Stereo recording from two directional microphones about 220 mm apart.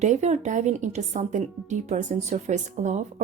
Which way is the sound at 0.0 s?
30° right (ahead or behind).